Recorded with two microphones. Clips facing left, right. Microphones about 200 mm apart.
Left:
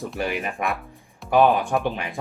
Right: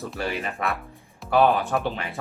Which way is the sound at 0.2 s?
15° left (ahead or behind).